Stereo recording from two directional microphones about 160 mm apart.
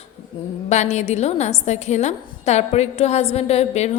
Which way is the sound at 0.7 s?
45° left (ahead or behind).